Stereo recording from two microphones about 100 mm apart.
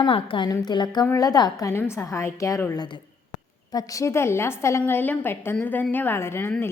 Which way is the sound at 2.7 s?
45° left (ahead or behind).